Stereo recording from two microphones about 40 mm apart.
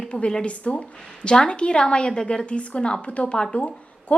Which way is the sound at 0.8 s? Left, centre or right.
Left.